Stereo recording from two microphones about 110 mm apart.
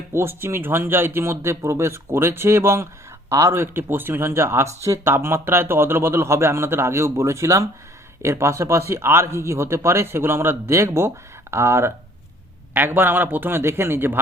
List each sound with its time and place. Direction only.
0.1 s speech: 20° right (ahead or behind)